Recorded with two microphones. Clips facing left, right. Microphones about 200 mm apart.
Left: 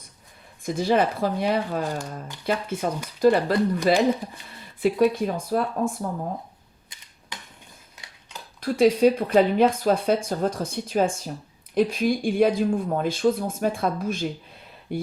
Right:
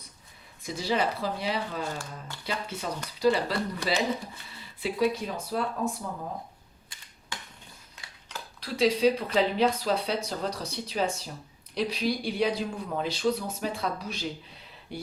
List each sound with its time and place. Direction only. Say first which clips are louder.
0.6 s speech: left 7 dB; 50° left (ahead or behind)
2.0 s speech: left 6 dB; 15° left (ahead or behind)
2.5 s speech: left 8 dB; 50° left (ahead or behind)
8.6 s speech: left 6 dB; 50° left (ahead or behind)